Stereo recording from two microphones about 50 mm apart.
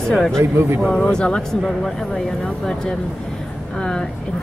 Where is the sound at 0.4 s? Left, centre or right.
Right.